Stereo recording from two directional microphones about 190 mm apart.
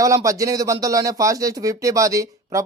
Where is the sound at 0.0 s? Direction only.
15° right (ahead or behind).